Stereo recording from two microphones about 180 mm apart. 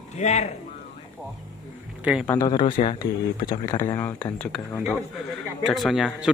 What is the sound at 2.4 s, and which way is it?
Speech, 30° left (ahead or behind).